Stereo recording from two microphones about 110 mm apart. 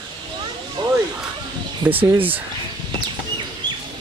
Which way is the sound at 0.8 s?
45° right (ahead or behind).